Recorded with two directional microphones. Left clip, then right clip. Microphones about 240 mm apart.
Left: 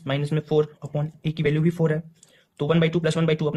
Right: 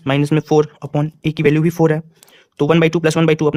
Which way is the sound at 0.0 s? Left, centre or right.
Right.